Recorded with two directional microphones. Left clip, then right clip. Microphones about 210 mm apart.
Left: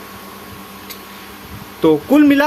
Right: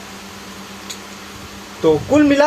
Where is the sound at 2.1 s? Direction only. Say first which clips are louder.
Left 2 dB; 40° left (ahead or behind).